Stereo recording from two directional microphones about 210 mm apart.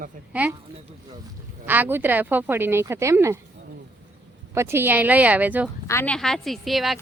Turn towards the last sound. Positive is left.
turn(degrees=0)  # may be behind; listen again after turning